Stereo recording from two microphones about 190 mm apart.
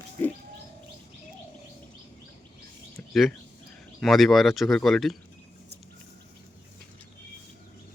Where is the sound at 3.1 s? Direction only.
Centre (ahead or behind).